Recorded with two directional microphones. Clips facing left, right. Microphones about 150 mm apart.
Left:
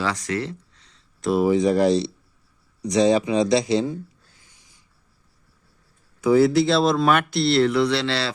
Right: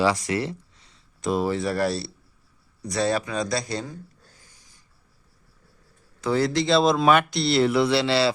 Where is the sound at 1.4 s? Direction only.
15° left (ahead or behind).